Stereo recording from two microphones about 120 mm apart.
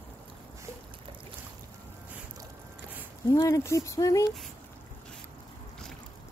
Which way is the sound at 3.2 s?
30° left (ahead or behind).